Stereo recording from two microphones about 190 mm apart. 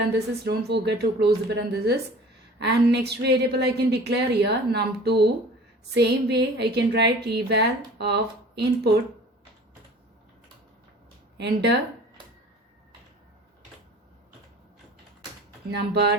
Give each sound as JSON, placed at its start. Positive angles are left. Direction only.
{"t": 0.1, "sound": "a woman's voice", "side_deg": -60}
{"t": 11.3, "sound": "a woman's voice", "side_deg": -65}
{"t": 15.7, "sound": "a woman's voice", "side_deg": -60}